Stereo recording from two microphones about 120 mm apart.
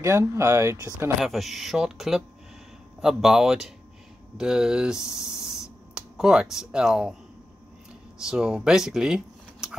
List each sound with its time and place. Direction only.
0.0 s speech: 25° right (ahead or behind)
1.2 s speech: centre (ahead or behind)
8.2 s speech: 5° right (ahead or behind)